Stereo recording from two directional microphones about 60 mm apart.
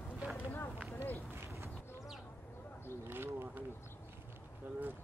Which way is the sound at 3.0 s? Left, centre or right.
Right.